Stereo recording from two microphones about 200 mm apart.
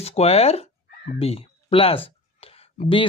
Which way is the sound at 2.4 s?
30° left (ahead or behind).